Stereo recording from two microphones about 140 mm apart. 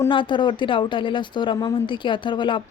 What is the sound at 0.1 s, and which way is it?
Speech, 35° left (ahead or behind).